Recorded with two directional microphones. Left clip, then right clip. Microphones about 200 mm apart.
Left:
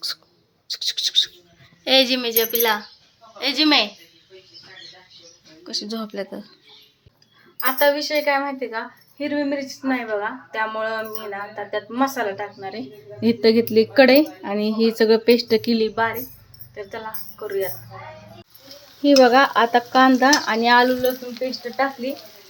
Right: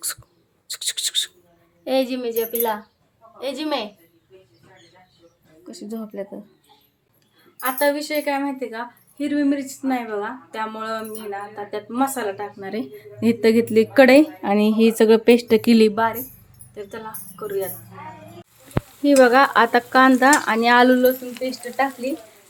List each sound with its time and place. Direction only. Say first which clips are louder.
0.7 s a sound: left 3 dB; 15° right (ahead or behind)
1.8 s a woman's voice: left 4 dB; 5° right (ahead or behind)
5.6 s speech: left 6 dB; 10° right (ahead or behind)
7.6 s speech: left 2 dB; 10° right (ahead or behind)
16.7 s speech: left 2 dB; 5° right (ahead or behind)
19.0 s speech: even; 5° right (ahead or behind)
20.7 s speech: right 3 dB; 25° right (ahead or behind)
21.3 s speech: even; 5° right (ahead or behind)